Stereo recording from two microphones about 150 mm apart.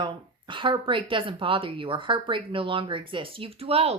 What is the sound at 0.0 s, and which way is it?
A woman's voice, 35° right (ahead or behind).